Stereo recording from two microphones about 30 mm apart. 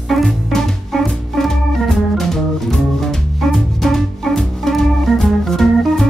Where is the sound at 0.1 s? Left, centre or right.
Centre.